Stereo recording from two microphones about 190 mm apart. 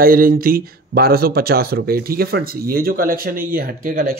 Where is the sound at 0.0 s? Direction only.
50° right (ahead or behind).